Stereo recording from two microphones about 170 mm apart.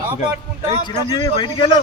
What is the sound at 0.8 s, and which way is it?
A man's voice, 25° left (ahead or behind).